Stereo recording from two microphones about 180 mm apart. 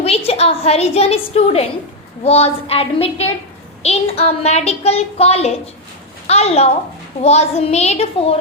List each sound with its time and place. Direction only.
0.0 s a woman's voice: 35° left (ahead or behind)